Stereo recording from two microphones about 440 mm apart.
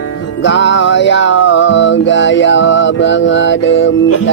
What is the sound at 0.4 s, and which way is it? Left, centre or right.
Music, left.